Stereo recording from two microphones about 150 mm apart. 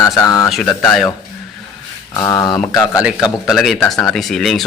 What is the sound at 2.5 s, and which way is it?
Speech, centre (ahead or behind).